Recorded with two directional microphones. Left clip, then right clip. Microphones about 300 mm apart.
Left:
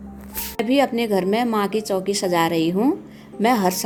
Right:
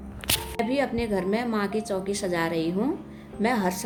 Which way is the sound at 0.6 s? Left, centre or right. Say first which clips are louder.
Left 9 dB; left.